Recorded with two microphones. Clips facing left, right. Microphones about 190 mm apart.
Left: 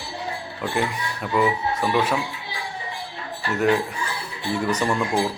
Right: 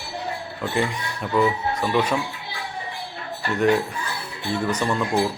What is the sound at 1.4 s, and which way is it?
Speech, 5° left (ahead or behind).